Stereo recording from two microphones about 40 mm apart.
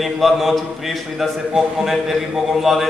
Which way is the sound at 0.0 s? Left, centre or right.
Centre.